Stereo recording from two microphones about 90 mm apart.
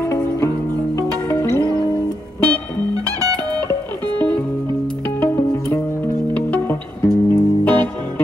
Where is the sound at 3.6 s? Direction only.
20° left (ahead or behind).